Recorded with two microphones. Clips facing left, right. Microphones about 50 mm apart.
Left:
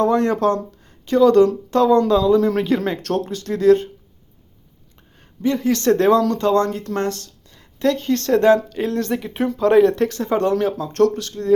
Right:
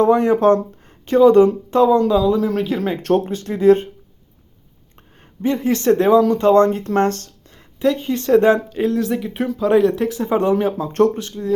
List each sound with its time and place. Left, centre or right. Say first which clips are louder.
0.0 s speech: right 3 dB; centre
0.4 s a sound: right 5 dB; right
1.2 s speech: right 2 dB; right
1.9 s speech: even; centre
3.0 s speech: right 5 dB; right
4.9 s speech: right 4 dB; right; by 6.4 s centre
6.4 s speech: right 5 dB; right
7.8 s speech: even; centre
8.8 s speech: right 3 dB; centre; by 11.3 s right